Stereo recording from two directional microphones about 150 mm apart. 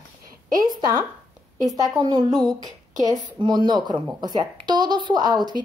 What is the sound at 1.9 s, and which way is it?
A woman's voice, 25° right (ahead or behind).